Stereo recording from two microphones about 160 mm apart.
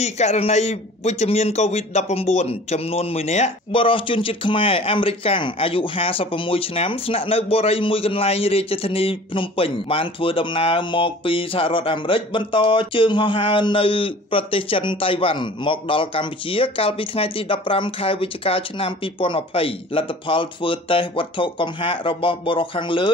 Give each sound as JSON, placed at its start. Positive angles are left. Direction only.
{"t": 0.0, "sound": "a man's voice", "side_deg": 45}